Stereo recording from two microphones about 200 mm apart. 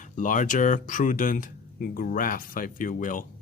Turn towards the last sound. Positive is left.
turn(degrees=40)  # may be behind; listen again after turning